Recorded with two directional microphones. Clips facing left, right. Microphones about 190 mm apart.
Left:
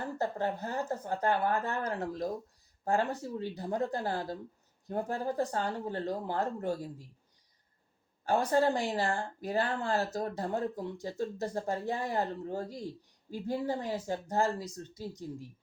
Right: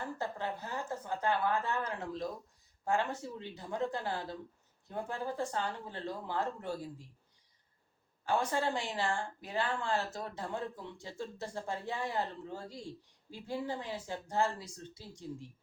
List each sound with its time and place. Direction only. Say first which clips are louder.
0.2 s speech: left 5 dB; 45° left (ahead or behind)
8.2 s speech: left 5 dB; 40° left (ahead or behind)